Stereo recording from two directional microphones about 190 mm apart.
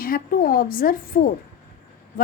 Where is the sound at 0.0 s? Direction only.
50° left (ahead or behind).